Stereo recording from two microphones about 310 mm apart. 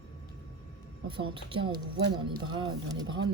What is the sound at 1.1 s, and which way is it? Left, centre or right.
A woman's voice, centre.